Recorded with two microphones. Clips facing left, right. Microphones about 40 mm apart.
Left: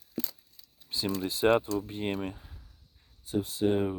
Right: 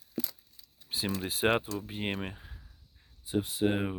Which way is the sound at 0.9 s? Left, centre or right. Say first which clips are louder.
Left 2 dB; right.